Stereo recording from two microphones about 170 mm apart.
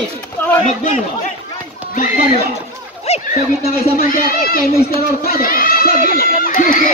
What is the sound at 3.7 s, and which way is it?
Speech, 60° left (ahead or behind).